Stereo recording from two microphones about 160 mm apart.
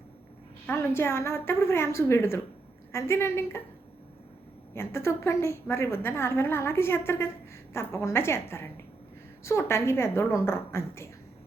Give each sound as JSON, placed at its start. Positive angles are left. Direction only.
{"t": 0.7, "sound": "a woman's voice", "side_deg": 15}
{"t": 4.7, "sound": "a woman's voice", "side_deg": 15}